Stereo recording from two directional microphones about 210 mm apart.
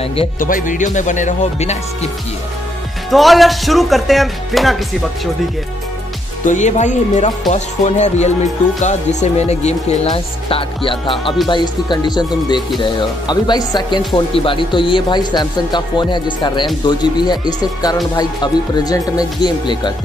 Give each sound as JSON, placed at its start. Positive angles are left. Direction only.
{"t": 0.4, "sound": "speech", "side_deg": 40}
{"t": 3.1, "sound": "speech", "side_deg": 0}
{"t": 6.4, "sound": "speech", "side_deg": 35}